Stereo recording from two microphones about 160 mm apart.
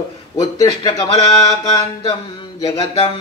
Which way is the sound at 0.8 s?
30° left (ahead or behind).